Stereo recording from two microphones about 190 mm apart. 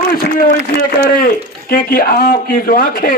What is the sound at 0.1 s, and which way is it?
A man's voice, 50° left (ahead or behind).